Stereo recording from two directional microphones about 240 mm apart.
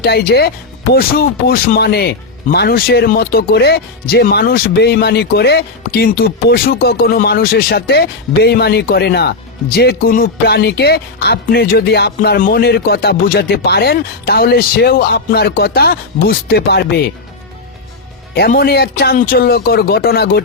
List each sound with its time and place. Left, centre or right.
0.0 s speech: left
18.3 s speech: left